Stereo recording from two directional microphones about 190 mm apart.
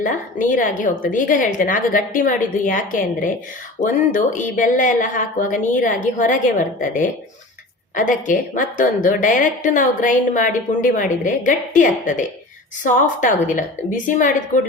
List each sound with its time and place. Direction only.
0.0 s a woman's voice: 40° left (ahead or behind)